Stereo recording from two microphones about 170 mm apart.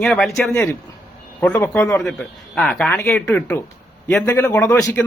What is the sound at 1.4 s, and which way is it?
A man's voice, 10° left (ahead or behind).